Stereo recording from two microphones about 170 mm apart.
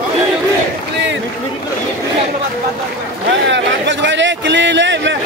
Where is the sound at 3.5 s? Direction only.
90° right.